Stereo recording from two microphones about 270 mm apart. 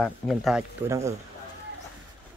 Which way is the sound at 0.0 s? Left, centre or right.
Centre.